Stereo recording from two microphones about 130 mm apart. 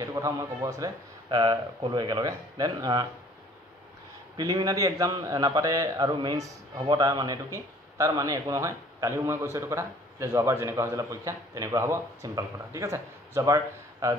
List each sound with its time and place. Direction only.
0.0 s a man's voice: 25° right (ahead or behind)
1.3 s speech: 35° right (ahead or behind)
4.4 s a man's voice: 30° right (ahead or behind)